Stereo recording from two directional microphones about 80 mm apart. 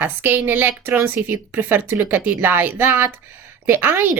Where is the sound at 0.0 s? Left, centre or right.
Right.